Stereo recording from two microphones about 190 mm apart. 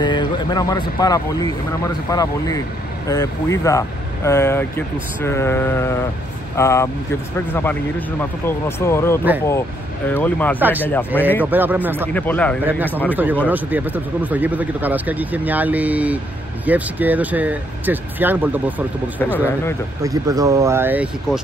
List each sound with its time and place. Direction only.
0.0 s speech: 25° left (ahead or behind); by 10.6 s 10° left (ahead or behind)
10.6 s speech: 10° right (ahead or behind)
12.1 s speech: 10° left (ahead or behind)
12.6 s speech: 10° right (ahead or behind)
19.3 s speech: 10° left (ahead or behind)
20.0 s speech: 20° right (ahead or behind)